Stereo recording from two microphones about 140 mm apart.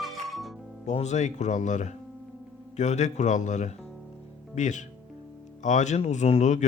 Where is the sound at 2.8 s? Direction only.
55° left (ahead or behind).